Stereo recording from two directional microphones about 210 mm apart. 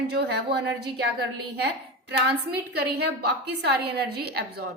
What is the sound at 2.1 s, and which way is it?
A woman's voice, 50° right (ahead or behind).